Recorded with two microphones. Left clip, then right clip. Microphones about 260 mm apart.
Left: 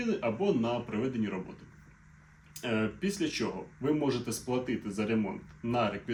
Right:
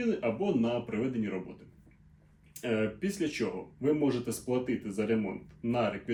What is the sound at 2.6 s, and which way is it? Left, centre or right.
Speech, centre.